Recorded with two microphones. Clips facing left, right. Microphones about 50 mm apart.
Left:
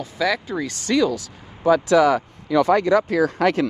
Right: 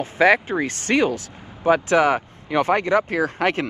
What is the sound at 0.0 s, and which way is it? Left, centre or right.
Speech, right.